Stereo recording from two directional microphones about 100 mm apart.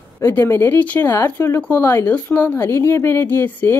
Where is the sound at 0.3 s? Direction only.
20° left (ahead or behind).